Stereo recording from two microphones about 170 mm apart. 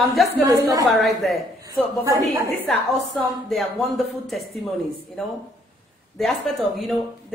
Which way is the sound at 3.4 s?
Centre (ahead or behind).